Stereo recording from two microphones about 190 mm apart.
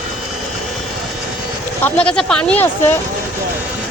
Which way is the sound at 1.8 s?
10° left (ahead or behind).